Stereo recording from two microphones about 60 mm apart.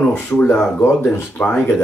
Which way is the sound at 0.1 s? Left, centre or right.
Left.